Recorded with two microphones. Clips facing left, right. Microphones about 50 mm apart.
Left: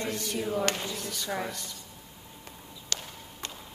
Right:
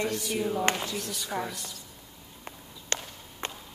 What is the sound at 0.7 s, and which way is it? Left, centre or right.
Speech, right.